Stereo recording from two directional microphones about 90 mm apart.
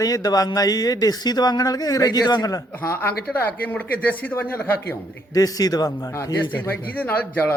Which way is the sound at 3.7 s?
20° left (ahead or behind).